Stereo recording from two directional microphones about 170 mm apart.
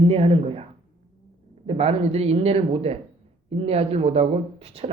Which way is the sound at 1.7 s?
35° right (ahead or behind).